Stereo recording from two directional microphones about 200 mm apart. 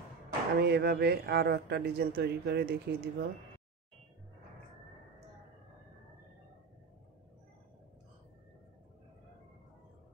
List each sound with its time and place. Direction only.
0.6 s speech: 55° right (ahead or behind)